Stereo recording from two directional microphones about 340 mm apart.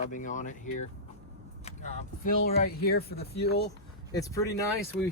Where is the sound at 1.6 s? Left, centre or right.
Centre.